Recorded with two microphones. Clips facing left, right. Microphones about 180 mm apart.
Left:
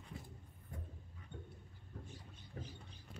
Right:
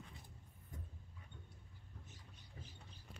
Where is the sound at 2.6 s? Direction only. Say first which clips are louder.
Left 9 dB; 60° left (ahead or behind).